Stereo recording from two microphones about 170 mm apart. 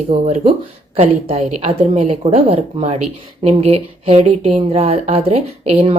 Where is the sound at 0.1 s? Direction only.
40° right (ahead or behind).